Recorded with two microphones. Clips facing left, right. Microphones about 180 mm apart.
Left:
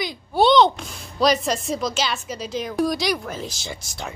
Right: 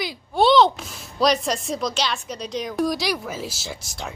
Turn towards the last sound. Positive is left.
turn(degrees=0)  # may be behind; listen again after turning